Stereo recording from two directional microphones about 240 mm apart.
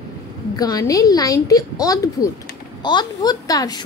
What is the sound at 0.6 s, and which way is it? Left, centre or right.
A woman's voice, centre.